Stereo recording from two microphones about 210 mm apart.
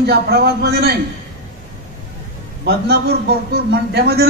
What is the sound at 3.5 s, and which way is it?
Speech, 50° right (ahead or behind).